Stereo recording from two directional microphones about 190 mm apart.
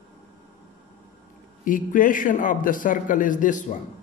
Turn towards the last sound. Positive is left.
turn(degrees=40)  # may be behind; listen again after turning